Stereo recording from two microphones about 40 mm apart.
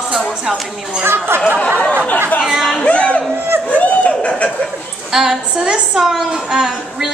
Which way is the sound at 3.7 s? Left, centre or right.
Left.